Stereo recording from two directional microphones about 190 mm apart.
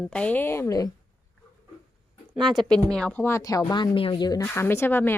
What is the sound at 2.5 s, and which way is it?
Speech, 5° left (ahead or behind).